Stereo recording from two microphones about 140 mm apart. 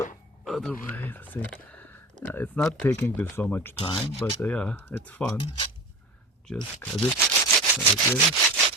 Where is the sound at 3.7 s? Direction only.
40° left (ahead or behind).